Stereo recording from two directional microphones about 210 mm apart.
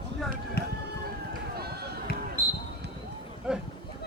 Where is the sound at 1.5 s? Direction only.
50° right (ahead or behind).